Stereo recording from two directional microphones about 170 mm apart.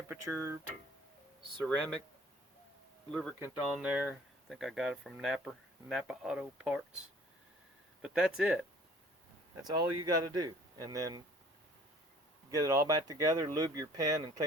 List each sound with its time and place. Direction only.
0.1 s speech: 15° right (ahead or behind)
3.1 s speech: 5° left (ahead or behind)
3.4 s speech: 5° right (ahead or behind)
9.6 s speech: 25° right (ahead or behind)
12.5 s speech: 20° right (ahead or behind)